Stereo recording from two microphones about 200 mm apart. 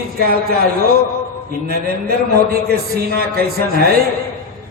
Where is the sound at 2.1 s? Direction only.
50° right (ahead or behind).